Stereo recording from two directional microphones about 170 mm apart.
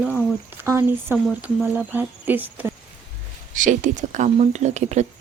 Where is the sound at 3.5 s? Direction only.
50° right (ahead or behind).